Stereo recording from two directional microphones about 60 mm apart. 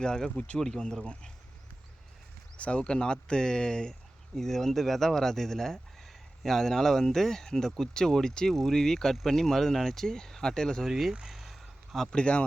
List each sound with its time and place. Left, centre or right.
0.0 s speech: centre
0.6 s speech: centre
2.6 s speech: centre
10.8 s speech: centre
11.1 s a sound: centre
12.1 s speech: centre